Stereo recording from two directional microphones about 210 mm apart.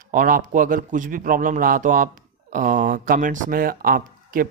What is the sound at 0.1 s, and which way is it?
Speech, 40° right (ahead or behind).